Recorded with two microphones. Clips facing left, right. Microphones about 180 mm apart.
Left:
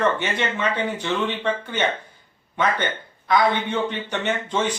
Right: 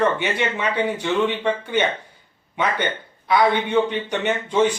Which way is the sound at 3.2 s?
10° right (ahead or behind).